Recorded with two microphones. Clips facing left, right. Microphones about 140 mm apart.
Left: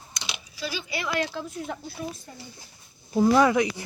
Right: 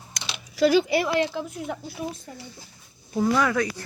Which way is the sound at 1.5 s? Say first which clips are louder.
Right 2 dB; 5° right (ahead or behind).